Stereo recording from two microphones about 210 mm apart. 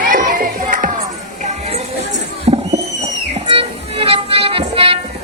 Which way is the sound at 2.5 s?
25° right (ahead or behind).